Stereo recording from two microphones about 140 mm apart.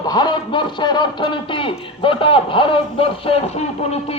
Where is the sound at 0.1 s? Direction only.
30° left (ahead or behind).